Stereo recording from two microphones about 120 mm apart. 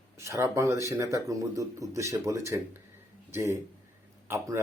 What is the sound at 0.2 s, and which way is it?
Speech, 25° right (ahead or behind).